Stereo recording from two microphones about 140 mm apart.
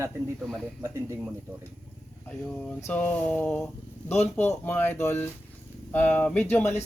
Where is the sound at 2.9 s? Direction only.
10° left (ahead or behind).